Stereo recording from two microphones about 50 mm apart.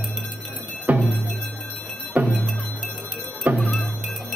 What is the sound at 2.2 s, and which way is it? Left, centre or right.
Music, right.